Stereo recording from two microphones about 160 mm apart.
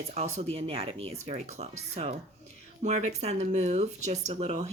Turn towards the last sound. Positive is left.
turn(degrees=-45)  # may be behind; listen again after turning